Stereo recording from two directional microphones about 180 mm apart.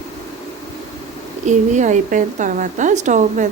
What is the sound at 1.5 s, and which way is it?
A woman's voice, 40° right (ahead or behind).